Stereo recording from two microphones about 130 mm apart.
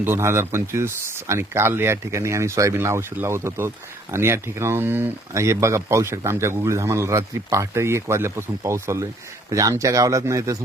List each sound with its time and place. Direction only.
0.0 s speech: 20° right (ahead or behind)